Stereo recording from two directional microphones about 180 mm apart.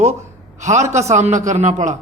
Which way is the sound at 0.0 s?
40° right (ahead or behind).